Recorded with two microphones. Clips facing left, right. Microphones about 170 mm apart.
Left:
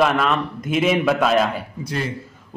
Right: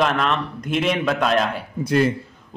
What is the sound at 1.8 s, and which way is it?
Speech, 55° right (ahead or behind).